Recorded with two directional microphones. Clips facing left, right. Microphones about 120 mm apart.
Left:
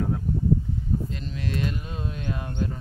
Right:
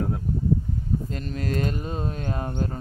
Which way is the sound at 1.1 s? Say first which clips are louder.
Right 3 dB; 45° right (ahead or behind).